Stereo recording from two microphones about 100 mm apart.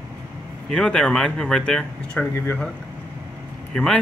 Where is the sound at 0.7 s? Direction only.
5° left (ahead or behind).